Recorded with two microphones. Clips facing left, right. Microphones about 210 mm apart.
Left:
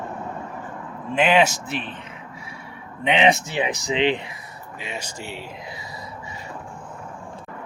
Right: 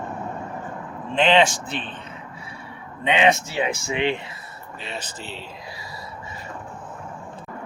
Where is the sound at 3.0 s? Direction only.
15° left (ahead or behind).